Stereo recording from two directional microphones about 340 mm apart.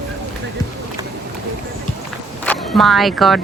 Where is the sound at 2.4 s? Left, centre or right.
Centre.